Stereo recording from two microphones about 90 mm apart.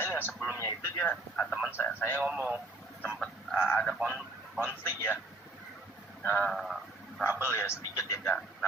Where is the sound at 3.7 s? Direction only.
10° left (ahead or behind).